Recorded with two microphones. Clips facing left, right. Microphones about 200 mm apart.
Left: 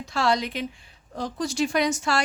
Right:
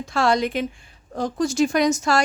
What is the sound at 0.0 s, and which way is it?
Speech, 50° right (ahead or behind).